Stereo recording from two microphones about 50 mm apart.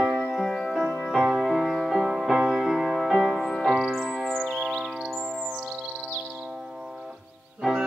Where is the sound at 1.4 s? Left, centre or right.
Centre.